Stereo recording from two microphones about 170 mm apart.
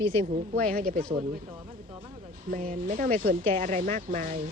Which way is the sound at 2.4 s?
55° right (ahead or behind).